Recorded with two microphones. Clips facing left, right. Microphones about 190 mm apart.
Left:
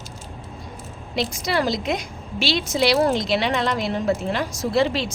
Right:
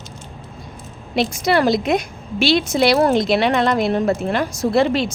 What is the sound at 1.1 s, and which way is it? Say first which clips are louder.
A woman's voice: right 6 dB; 60° right (ahead or behind).